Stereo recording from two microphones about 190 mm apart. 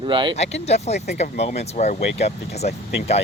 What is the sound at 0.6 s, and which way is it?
Speech, 35° left (ahead or behind).